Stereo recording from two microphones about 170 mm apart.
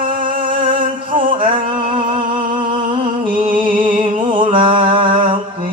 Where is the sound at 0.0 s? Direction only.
55° right (ahead or behind).